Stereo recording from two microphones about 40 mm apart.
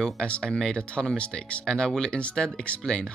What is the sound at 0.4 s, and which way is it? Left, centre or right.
Speech, centre.